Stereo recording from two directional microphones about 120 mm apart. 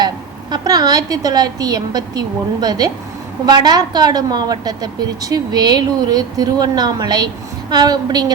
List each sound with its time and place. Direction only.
0.5 s a woman's voice: 35° right (ahead or behind)